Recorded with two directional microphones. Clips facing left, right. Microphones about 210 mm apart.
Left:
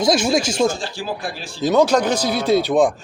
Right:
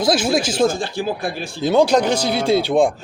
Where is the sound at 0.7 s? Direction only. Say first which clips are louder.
Right 4 dB; 55° right (ahead or behind).